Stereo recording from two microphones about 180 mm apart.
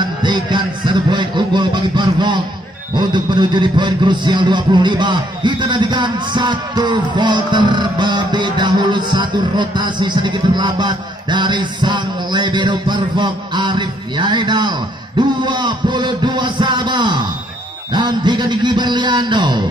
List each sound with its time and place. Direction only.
0.0 s speech: 25° right (ahead or behind)